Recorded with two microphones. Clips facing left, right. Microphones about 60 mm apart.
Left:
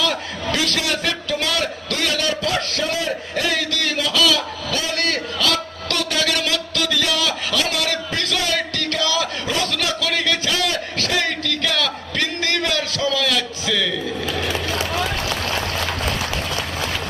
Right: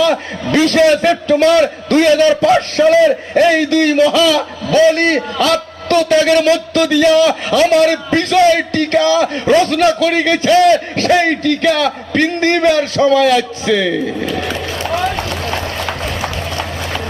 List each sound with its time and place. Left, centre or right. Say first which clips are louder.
0.0 s a man's voice: right 8 dB; right
15.1 s run: right 4 dB; right